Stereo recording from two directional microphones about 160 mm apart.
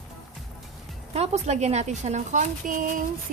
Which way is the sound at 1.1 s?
40° right (ahead or behind).